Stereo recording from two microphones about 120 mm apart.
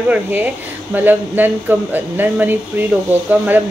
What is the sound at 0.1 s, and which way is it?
Speech, 15° right (ahead or behind).